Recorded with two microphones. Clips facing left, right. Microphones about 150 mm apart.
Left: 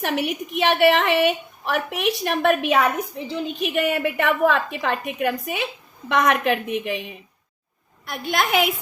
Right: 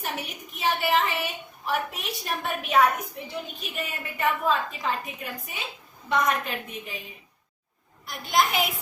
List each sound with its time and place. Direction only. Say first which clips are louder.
0.0 s a woman's voice: left 10 dB; 75° left (ahead or behind)